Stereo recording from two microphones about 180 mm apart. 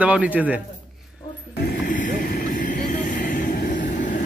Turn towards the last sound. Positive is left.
turn(degrees=45)  # may be behind; listen again after turning